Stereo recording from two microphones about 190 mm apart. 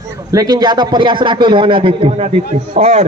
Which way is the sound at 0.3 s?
20° right (ahead or behind).